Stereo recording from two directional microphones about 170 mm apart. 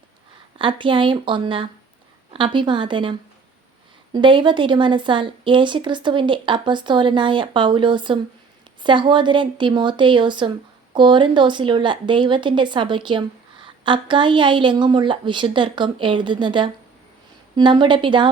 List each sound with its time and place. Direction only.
0.6 s a woman's voice: 30° right (ahead or behind)